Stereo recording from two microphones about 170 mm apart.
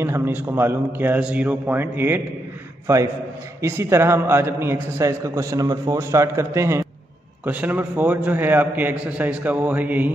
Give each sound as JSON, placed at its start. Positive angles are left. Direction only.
{"t": 0.0, "sound": "a man's voice", "side_deg": -15}